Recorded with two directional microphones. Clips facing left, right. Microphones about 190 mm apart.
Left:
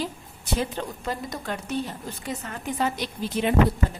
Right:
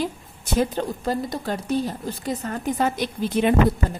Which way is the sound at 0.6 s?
35° right (ahead or behind).